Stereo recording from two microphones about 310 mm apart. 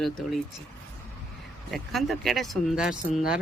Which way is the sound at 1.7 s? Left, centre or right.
Centre.